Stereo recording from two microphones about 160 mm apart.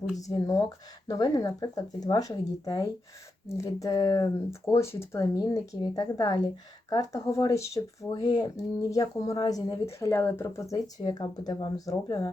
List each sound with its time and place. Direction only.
0.2 s speech: 20° left (ahead or behind)